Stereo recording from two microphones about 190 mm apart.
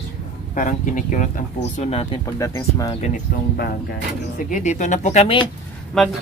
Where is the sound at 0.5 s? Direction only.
45° left (ahead or behind).